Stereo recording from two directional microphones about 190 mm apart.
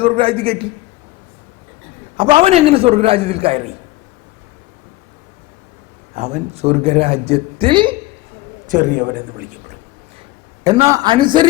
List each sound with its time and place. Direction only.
0.0 s a man's voice: 30° right (ahead or behind)
2.1 s a man's voice: 30° right (ahead or behind)
6.1 s a man's voice: 35° right (ahead or behind)
8.7 s a man's voice: 50° right (ahead or behind)
10.8 s a man's voice: 20° right (ahead or behind)